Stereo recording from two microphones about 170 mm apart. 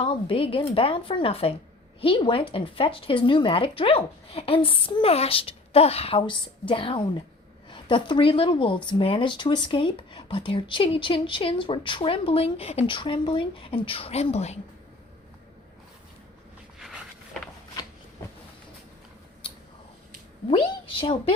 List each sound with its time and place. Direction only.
0.0 s a woman's voice: 30° left (ahead or behind)
16.8 s a sound: 5° right (ahead or behind)
19.4 s mouse: 30° left (ahead or behind)
21.0 s speech: 30° left (ahead or behind)